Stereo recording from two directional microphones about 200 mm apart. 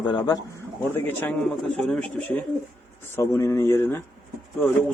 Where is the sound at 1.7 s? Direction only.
5° left (ahead or behind).